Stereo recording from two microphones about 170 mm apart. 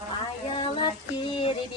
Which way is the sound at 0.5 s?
30° left (ahead or behind).